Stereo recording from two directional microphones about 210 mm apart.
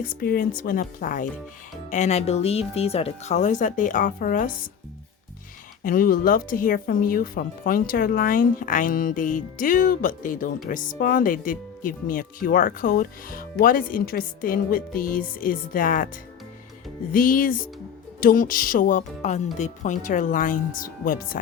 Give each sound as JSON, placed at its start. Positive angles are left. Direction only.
{"t": 0.0, "sound": "speech", "side_deg": 40}
{"t": 5.8, "sound": "speech", "side_deg": 40}
{"t": 17.1, "sound": "speech", "side_deg": 40}